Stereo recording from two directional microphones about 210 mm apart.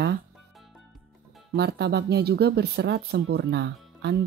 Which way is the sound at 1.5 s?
50° right (ahead or behind).